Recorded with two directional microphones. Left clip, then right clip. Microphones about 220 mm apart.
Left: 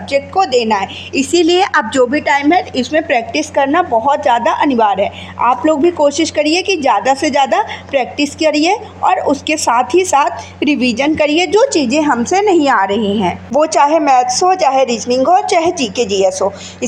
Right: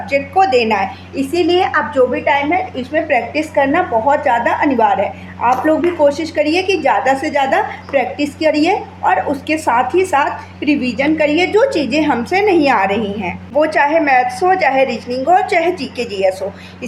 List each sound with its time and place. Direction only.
0.1 s a woman's voice: 30° left (ahead or behind)